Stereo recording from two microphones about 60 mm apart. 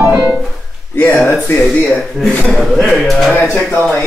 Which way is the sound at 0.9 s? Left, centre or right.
Left.